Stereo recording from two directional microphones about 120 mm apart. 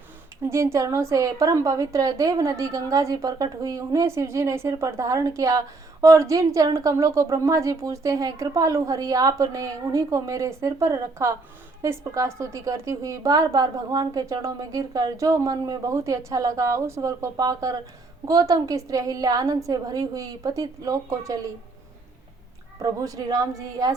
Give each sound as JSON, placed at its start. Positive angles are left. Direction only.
{"t": 0.5, "sound": "a woman's voice", "side_deg": -25}
{"t": 22.8, "sound": "a woman's voice", "side_deg": -30}